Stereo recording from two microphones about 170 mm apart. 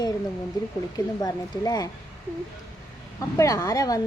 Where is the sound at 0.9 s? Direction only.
20° left (ahead or behind).